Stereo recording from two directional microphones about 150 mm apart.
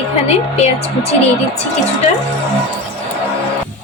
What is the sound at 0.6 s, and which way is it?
Speech, 45° left (ahead or behind).